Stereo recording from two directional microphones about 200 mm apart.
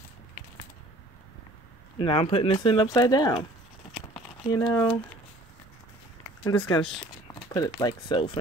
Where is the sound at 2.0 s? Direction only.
30° left (ahead or behind).